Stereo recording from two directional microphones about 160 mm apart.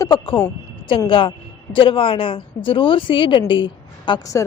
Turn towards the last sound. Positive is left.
turn(degrees=20)  # may be behind; listen again after turning